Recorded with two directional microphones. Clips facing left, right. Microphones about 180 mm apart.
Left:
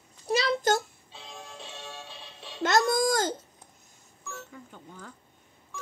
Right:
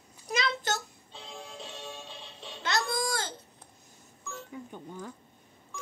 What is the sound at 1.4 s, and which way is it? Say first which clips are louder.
Music: right 1 dB; 15° right (ahead or behind).